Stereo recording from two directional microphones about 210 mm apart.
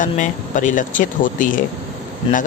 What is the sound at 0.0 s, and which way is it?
Speech, 40° left (ahead or behind).